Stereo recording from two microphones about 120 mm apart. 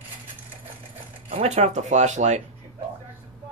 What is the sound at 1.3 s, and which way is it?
Speech, 65° right (ahead or behind).